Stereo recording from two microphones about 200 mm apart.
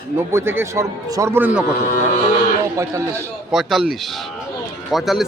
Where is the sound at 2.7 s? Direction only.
15° right (ahead or behind).